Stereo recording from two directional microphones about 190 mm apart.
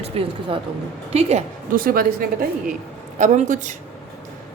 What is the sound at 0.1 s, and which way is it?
Speech, 30° right (ahead or behind).